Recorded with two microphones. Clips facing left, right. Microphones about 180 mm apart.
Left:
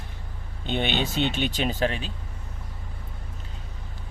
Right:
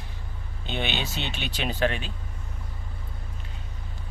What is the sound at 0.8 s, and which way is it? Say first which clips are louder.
Speech: left 8 dB; 50° left (ahead or behind).